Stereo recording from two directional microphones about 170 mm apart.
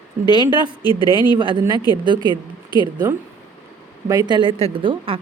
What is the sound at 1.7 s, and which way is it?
Speech, 25° left (ahead or behind).